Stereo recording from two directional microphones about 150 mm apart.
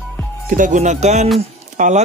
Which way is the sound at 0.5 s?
60° right (ahead or behind).